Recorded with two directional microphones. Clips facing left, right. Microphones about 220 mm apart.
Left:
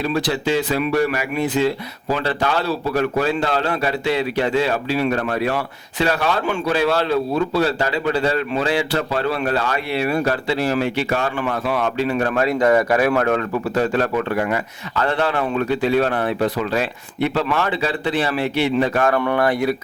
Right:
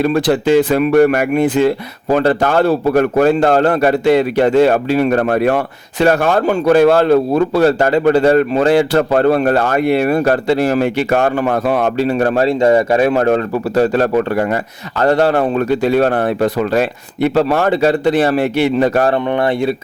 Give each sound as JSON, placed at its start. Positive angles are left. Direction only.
{"t": 0.0, "sound": "a man's voice", "side_deg": -55}
{"t": 19.4, "sound": "speech", "side_deg": -25}